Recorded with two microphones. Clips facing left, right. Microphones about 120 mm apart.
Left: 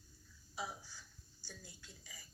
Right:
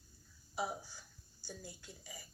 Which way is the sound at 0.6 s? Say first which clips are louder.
Right 6 dB; 55° right (ahead or behind).